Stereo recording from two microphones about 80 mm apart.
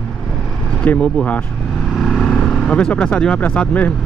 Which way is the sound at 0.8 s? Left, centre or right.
Centre.